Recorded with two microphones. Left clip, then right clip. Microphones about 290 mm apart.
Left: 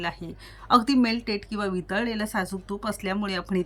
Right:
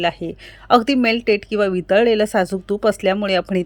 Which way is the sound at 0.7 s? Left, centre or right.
Centre.